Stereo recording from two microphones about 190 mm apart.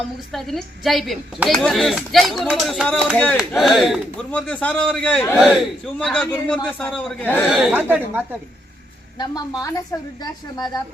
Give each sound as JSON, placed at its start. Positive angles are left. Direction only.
{"t": 0.3, "sound": "speech", "side_deg": 0}
{"t": 7.5, "sound": "speech", "side_deg": -5}
{"t": 9.1, "sound": "a woman's voice", "side_deg": 20}